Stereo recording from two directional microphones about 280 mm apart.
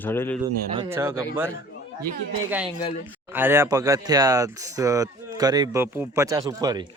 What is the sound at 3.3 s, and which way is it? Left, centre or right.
Speech, centre.